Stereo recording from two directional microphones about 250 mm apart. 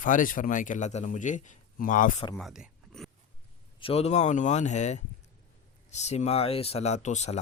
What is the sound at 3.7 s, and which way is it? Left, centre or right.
A man's voice, left.